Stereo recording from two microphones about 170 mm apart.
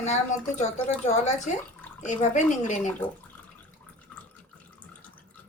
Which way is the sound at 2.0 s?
45° left (ahead or behind).